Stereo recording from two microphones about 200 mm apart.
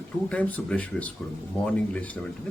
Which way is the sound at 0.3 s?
5° left (ahead or behind).